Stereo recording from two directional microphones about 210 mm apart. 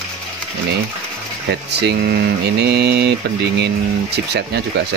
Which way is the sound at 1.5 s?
55° right (ahead or behind).